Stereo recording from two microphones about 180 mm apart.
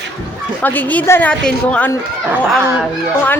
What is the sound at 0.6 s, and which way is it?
A woman's voice, 10° left (ahead or behind).